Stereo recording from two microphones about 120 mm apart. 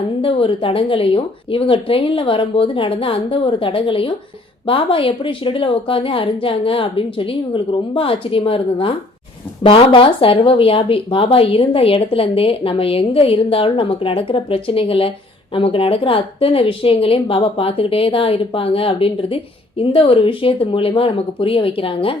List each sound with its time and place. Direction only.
0.2 s speech: 50° left (ahead or behind)